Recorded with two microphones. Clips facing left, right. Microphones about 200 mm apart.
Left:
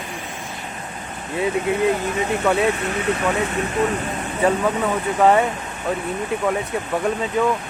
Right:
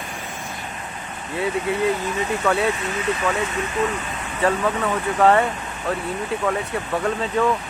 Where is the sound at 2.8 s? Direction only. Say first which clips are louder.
Left 2 dB; 35° left (ahead or behind).